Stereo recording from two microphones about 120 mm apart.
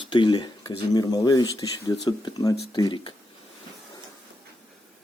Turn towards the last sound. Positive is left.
turn(degrees=45)  # may be behind; listen again after turning